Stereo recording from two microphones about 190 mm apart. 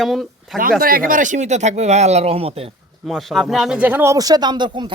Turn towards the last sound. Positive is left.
turn(degrees=-25)  # may be behind; listen again after turning